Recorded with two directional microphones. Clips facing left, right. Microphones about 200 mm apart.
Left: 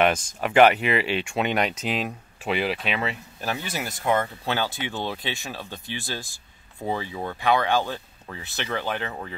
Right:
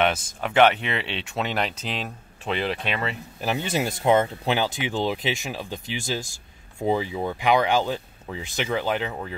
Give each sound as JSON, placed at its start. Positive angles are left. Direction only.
{"t": 0.4, "sound": "speech", "side_deg": 5}
{"t": 3.3, "sound": "speech", "side_deg": -20}